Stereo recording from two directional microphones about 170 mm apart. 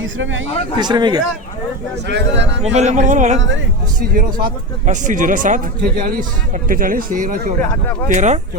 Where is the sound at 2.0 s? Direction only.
80° right.